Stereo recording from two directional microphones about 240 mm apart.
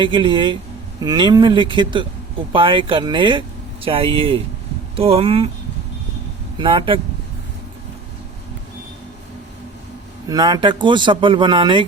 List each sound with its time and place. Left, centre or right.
0.0 s speech: centre
6.6 s speech: right
10.2 s speech: centre